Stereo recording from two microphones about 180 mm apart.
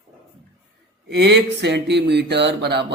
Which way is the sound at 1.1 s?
70° right (ahead or behind).